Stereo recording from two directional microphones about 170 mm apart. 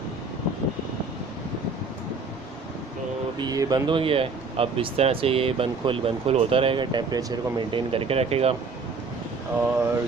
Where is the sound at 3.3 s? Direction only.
25° right (ahead or behind).